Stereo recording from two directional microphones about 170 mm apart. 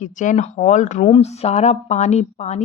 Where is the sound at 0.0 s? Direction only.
45° left (ahead or behind).